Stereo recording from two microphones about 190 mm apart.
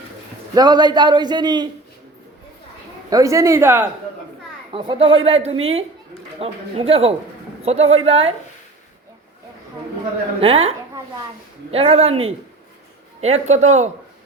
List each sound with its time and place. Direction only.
0.5 s a man's voice: 20° right (ahead or behind)
3.1 s speech: 15° right (ahead or behind)
4.7 s a man's voice: 25° right (ahead or behind)
10.4 s speech: 30° right (ahead or behind)